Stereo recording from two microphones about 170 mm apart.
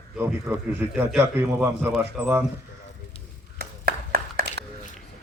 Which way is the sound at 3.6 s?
65° right (ahead or behind).